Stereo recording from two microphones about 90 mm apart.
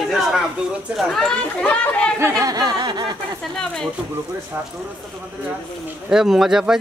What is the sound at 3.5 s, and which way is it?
Speech, 5° left (ahead or behind).